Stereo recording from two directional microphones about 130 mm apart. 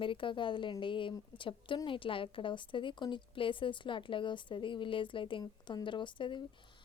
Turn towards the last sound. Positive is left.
turn(degrees=40)  # may be behind; listen again after turning